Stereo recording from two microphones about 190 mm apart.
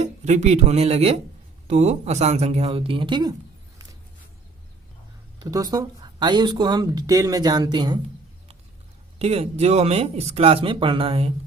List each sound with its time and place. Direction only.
0.0 s speech: 35° right (ahead or behind)
5.4 s speech: 20° right (ahead or behind)
9.1 s speech: 35° right (ahead or behind)